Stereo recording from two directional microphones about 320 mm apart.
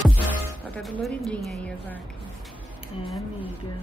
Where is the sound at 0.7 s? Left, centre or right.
Centre.